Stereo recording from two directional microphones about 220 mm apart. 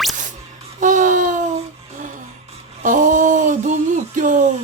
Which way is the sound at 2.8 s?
35° right (ahead or behind).